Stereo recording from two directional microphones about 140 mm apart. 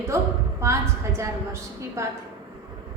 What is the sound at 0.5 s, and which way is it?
A woman's voice, 20° right (ahead or behind).